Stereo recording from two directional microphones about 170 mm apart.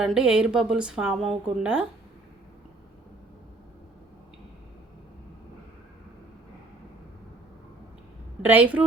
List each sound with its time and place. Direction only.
0.0 s a woman's voice: 5° right (ahead or behind)
8.4 s a woman's voice: 10° right (ahead or behind)